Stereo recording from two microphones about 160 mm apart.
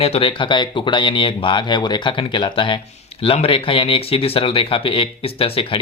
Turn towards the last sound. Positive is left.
turn(degrees=35)  # may be behind; listen again after turning